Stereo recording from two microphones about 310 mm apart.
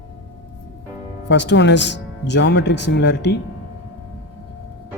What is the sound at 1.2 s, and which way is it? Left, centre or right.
Speech, left.